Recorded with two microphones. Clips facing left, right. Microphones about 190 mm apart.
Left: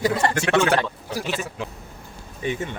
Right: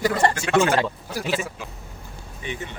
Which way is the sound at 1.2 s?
Centre (ahead or behind).